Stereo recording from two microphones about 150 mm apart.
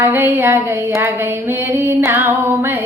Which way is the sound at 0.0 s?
15° right (ahead or behind).